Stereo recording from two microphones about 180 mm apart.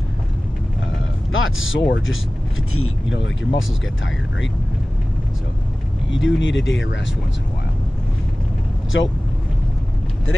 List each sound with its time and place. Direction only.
1.3 s speech: 90° left
6.1 s speech: 90° left
8.9 s speech: 90° left